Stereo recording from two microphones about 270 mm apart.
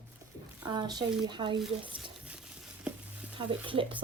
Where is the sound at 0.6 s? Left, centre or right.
Centre.